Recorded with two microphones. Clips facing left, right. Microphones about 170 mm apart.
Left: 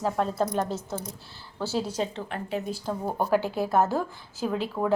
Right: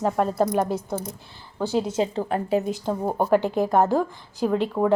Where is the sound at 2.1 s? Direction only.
35° right (ahead or behind).